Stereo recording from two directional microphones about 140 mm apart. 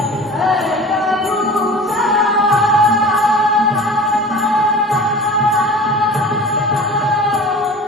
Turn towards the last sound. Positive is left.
turn(degrees=0)  # may be behind; listen again after turning